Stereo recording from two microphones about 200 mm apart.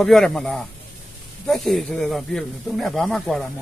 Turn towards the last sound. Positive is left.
turn(degrees=0)  # may be behind; listen again after turning